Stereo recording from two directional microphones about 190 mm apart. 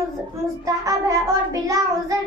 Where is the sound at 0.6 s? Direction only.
15° right (ahead or behind).